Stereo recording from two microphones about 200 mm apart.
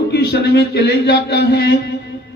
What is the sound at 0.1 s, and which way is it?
A man's voice, 55° left (ahead or behind).